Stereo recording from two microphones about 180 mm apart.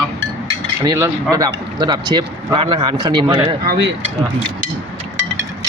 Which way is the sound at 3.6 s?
65° right (ahead or behind).